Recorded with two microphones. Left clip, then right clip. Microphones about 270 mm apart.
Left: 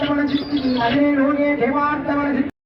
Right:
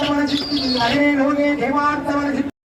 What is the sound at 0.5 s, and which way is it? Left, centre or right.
Bird, right.